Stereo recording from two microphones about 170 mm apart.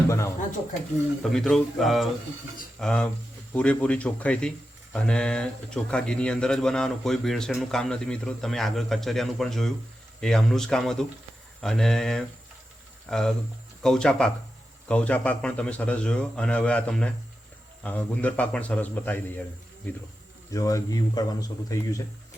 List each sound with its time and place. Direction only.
0.1 s a sound: 15° left (ahead or behind)
1.2 s speech: centre (ahead or behind)
20.5 s speech: 20° left (ahead or behind)